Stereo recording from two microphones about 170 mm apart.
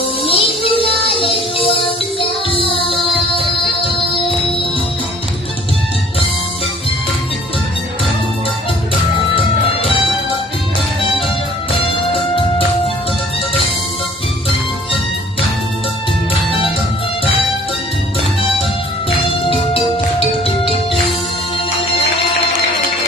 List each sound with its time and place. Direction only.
0.3 s music: 30° left (ahead or behind)
19.3 s music: 30° left (ahead or behind)